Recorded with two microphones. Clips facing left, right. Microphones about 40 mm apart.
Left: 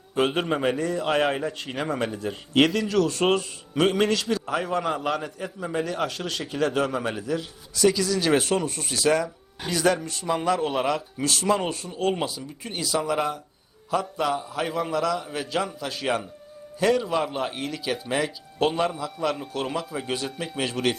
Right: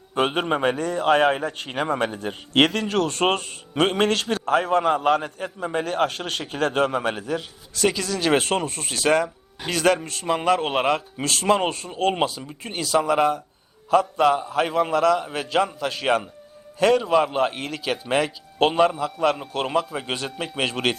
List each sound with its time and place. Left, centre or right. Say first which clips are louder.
0.1 s a man's voice: right 2 dB; right
17.7 s a man's voice: right 2 dB; right
18.1 s a man's voice: right 7 dB; right